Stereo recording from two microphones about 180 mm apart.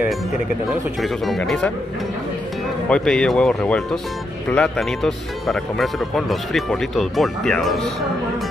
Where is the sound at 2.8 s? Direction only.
5° left (ahead or behind).